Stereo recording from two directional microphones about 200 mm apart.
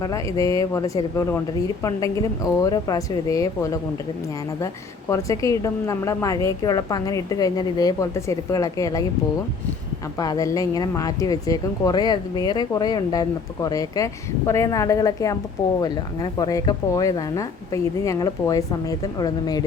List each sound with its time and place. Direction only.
0.0 s a woman's voice: 15° left (ahead or behind)
10.2 s a woman's voice: 20° left (ahead or behind)